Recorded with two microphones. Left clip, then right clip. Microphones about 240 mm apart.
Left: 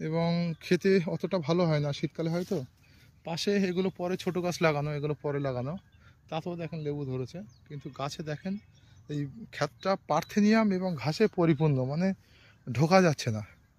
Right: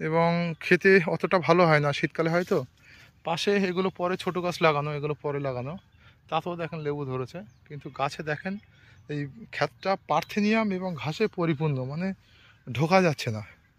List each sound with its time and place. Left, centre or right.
0.0 s speech: centre